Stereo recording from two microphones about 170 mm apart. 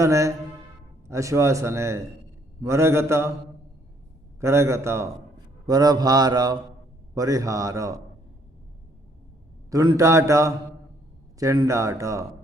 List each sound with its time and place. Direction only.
0.0 s speech: 20° right (ahead or behind)
4.4 s speech: 15° right (ahead or behind)
5.6 s mantra: 20° right (ahead or behind)
9.6 s speech: 20° right (ahead or behind)
11.3 s mantra: 20° right (ahead or behind)